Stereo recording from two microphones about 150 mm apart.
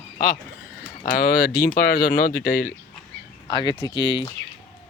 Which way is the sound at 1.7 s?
90° left.